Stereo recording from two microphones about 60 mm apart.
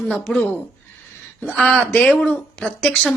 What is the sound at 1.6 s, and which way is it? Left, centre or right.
Speech, centre.